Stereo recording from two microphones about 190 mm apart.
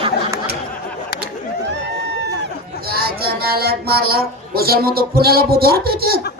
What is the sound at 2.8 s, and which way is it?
Speech, 55° right (ahead or behind).